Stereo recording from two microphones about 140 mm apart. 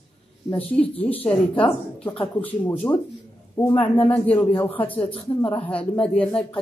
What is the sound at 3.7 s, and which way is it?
Speech, 40° left (ahead or behind).